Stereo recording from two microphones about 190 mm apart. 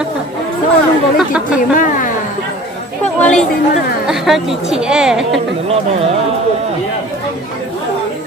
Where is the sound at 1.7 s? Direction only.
45° left (ahead or behind).